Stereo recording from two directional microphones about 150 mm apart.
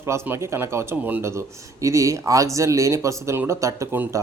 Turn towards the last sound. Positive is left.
turn(degrees=-20)  # may be behind; listen again after turning